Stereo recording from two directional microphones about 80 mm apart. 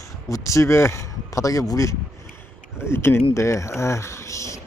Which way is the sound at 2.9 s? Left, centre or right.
Left.